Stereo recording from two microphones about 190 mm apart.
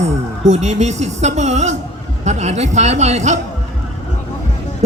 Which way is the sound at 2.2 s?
35° right (ahead or behind).